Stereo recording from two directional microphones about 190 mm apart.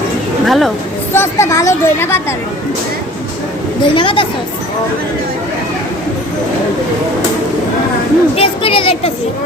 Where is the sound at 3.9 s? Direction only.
25° left (ahead or behind).